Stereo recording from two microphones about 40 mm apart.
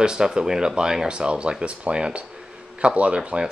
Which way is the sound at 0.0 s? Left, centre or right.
Centre.